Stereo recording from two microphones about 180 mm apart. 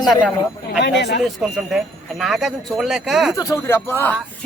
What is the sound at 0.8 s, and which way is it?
Speech, 75° left (ahead or behind).